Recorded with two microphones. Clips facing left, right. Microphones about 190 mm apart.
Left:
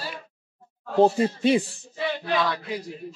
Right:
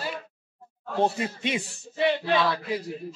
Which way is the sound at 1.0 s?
35° left (ahead or behind).